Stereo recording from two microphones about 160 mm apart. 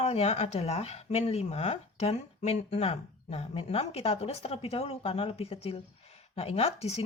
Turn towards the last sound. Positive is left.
turn(degrees=40)  # may be behind; listen again after turning